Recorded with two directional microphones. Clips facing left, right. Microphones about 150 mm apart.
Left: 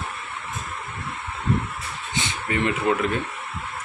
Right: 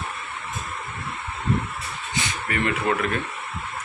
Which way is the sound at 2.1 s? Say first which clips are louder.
Left 1 dB; 20° left (ahead or behind).